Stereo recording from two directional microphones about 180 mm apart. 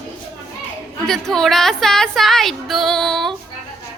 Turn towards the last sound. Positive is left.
turn(degrees=0)  # may be behind; listen again after turning